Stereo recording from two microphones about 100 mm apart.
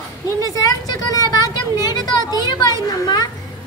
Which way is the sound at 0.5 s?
40° left (ahead or behind).